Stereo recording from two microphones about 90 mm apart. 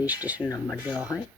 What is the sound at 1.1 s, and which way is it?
Speech, 35° left (ahead or behind).